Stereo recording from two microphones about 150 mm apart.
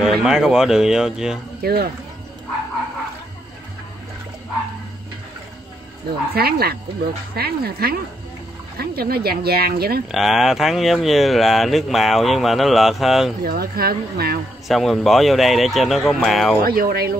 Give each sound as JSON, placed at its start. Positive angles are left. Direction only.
{"t": 0.0, "sound": "speech", "side_deg": -5}
{"t": 1.6, "sound": "speech", "side_deg": -90}
{"t": 6.3, "sound": "speech", "side_deg": -90}
{"t": 10.1, "sound": "speech", "side_deg": 0}
{"t": 13.4, "sound": "speech", "side_deg": -90}
{"t": 14.7, "sound": "speech", "side_deg": 0}
{"t": 16.6, "sound": "speech", "side_deg": -90}